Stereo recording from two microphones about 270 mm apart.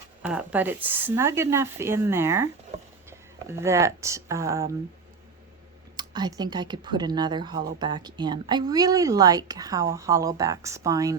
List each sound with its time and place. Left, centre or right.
0.2 s a woman's voice: centre
6.0 s a woman's voice: centre